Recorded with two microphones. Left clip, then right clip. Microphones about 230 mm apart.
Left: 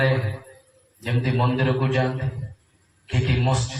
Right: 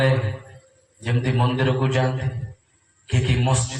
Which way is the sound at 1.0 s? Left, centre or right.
Right.